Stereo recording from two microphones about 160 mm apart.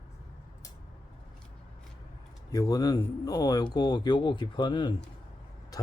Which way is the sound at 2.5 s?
25° left (ahead or behind).